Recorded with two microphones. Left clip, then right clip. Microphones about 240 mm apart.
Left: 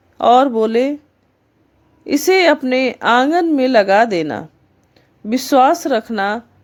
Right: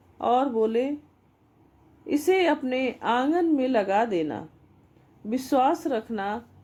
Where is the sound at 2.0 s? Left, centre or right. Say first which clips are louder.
Left 10 dB; left.